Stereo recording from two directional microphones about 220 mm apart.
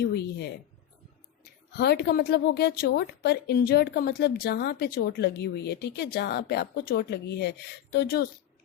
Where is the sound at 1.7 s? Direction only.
50° left (ahead or behind).